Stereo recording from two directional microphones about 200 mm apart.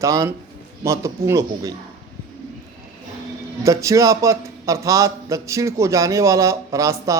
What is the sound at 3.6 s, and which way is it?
Speech, 15° right (ahead or behind).